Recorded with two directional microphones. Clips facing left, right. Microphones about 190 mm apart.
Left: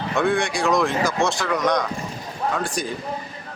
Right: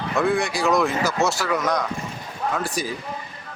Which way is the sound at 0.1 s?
5° right (ahead or behind).